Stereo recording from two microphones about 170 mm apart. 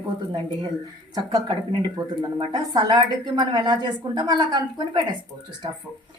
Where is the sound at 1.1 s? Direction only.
25° right (ahead or behind).